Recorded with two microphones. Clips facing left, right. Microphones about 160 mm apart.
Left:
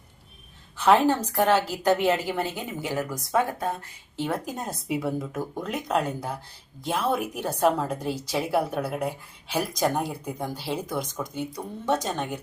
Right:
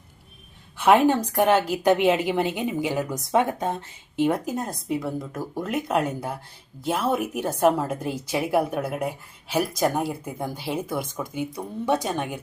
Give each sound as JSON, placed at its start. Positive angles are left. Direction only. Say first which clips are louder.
{"t": 0.8, "sound": "speech", "louder": "right 2 dB", "side_deg": -10}
{"t": 4.3, "sound": "speech", "louder": "right 5 dB", "side_deg": -5}